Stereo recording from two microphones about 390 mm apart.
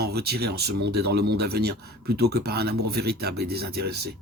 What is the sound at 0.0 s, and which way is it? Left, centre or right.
Speech, right.